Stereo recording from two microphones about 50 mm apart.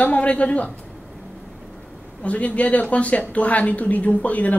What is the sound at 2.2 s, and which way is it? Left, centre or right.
A woman's voice, left.